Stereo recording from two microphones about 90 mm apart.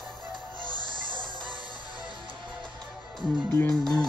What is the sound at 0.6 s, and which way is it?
Music, 65° right (ahead or behind).